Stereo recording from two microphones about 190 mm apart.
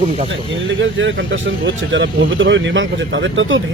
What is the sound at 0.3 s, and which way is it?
Speech, 75° right (ahead or behind).